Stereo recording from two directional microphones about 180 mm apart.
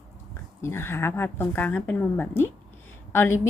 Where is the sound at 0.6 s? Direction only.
15° left (ahead or behind).